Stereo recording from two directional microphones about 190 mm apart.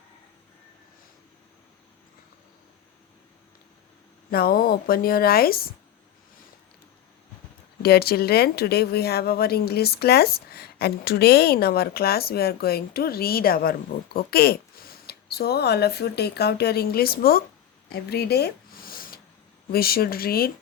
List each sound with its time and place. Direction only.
4.3 s speech: 50° left (ahead or behind)
7.8 s a woman's voice: 55° left (ahead or behind)
17.8 s a sound: 55° left (ahead or behind)
19.7 s speech: 55° left (ahead or behind)